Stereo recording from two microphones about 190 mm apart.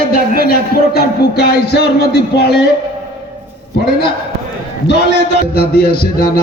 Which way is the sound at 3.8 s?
55° left (ahead or behind).